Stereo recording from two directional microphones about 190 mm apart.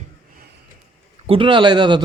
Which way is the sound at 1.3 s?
25° right (ahead or behind).